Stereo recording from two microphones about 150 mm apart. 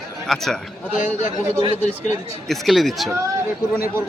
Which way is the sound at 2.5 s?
Centre (ahead or behind).